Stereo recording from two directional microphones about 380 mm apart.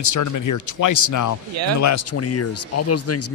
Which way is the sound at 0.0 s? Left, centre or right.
Left.